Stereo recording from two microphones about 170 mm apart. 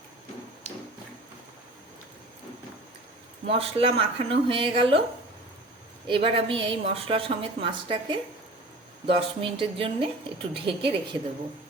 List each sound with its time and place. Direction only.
3.4 s a woman's voice: 35° right (ahead or behind)
6.1 s a woman's voice: 30° right (ahead or behind)